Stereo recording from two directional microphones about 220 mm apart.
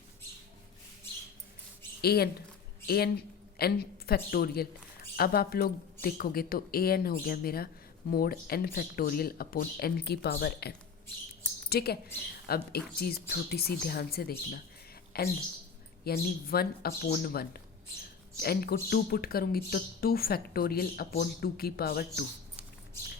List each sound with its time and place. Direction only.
2.0 s speech: 45° left (ahead or behind)